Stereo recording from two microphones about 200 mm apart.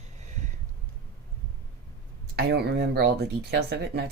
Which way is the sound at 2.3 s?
55° right (ahead or behind).